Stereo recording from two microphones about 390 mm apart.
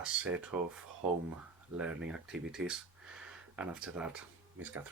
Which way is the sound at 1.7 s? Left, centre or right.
Centre.